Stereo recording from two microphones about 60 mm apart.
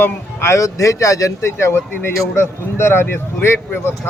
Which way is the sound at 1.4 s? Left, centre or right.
Left.